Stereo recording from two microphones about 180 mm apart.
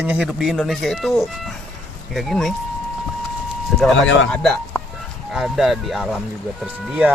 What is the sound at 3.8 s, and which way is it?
Speech, centre (ahead or behind).